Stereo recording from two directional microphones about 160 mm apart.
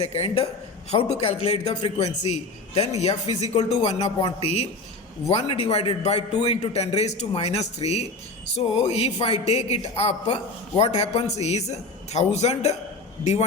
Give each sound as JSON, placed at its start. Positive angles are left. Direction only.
{"t": 0.0, "sound": "a man's voice", "side_deg": 35}